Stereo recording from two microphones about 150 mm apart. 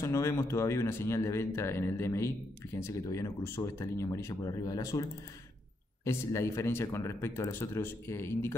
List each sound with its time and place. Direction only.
0.0 s speech: 20° left (ahead or behind)
6.0 s speech: 20° left (ahead or behind)